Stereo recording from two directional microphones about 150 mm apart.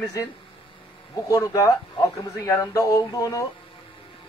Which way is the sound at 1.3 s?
20° left (ahead or behind).